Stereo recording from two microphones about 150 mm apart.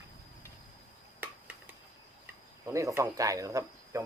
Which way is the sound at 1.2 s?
10° right (ahead or behind).